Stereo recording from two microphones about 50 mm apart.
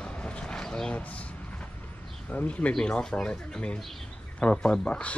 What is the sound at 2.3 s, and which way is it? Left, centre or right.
Speech, left.